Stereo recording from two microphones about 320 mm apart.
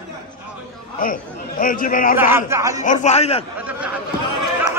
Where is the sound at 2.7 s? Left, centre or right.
Left.